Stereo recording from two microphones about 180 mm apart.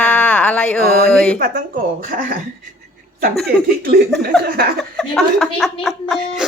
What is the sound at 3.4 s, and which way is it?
Speech, 55° right (ahead or behind).